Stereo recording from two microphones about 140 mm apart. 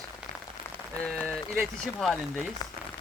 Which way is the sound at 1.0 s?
5° left (ahead or behind).